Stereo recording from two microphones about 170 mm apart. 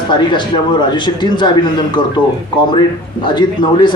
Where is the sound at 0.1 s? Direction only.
25° left (ahead or behind).